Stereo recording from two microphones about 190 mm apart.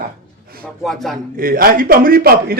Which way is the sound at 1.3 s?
50° right (ahead or behind).